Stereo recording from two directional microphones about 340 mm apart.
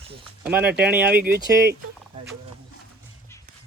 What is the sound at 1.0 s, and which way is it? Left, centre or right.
Speech, right.